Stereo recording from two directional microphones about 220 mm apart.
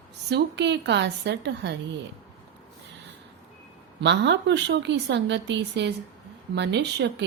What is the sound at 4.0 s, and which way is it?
A woman's voice, 55° right (ahead or behind).